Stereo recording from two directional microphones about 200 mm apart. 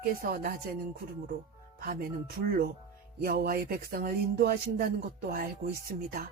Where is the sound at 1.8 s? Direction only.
45° right (ahead or behind).